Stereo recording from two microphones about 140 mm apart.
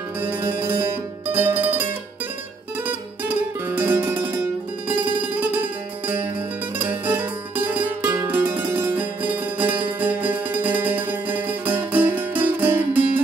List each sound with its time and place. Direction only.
0.2 s music: 15° right (ahead or behind)
1.3 s zither: 15° right (ahead or behind)
2.8 s music: 15° right (ahead or behind)
6.0 s music: 15° right (ahead or behind)